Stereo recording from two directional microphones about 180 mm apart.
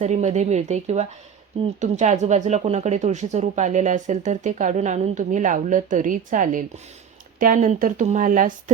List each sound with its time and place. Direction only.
0.0 s speech: 40° right (ahead or behind)